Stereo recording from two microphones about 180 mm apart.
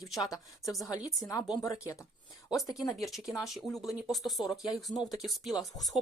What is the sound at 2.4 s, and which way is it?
Speech, 20° left (ahead or behind).